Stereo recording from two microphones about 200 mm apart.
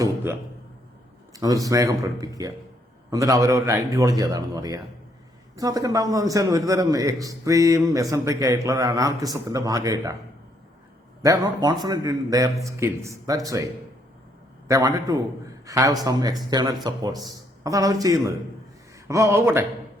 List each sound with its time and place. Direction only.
1.3 s a man's voice: 15° right (ahead or behind)
11.2 s a man's voice: 15° right (ahead or behind)
14.7 s a man's voice: 15° right (ahead or behind)